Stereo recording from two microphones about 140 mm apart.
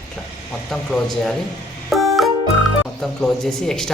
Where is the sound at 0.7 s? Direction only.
Centre (ahead or behind).